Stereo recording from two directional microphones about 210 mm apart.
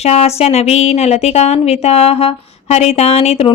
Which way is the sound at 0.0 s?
30° left (ahead or behind).